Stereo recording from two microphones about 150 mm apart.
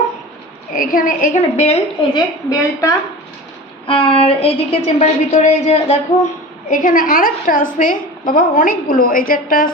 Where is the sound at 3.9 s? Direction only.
35° left (ahead or behind).